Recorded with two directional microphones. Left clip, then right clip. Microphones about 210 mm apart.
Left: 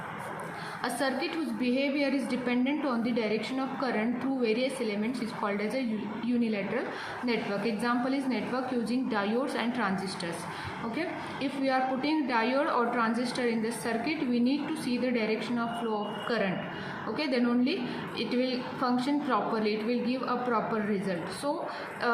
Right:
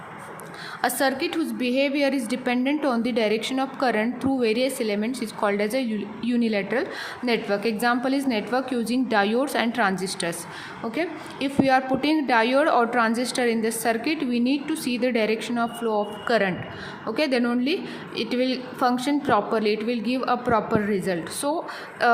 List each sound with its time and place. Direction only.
0.8 s a woman's voice: 50° right (ahead or behind)
22.0 s a woman's voice: 50° right (ahead or behind)